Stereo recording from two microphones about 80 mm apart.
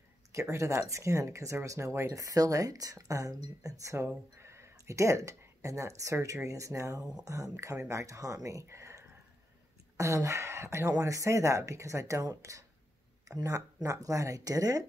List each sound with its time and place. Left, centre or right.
0.3 s speech: right
7.5 s speech: right
13.8 s speech: right